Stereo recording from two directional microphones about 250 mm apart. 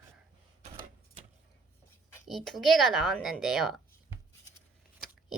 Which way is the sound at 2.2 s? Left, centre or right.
Centre.